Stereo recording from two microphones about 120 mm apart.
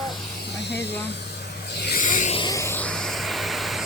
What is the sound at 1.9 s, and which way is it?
Vehicle, 90° left.